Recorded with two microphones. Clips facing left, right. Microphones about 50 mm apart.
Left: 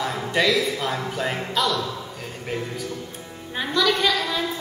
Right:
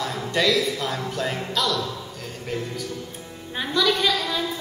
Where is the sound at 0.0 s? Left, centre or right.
Centre.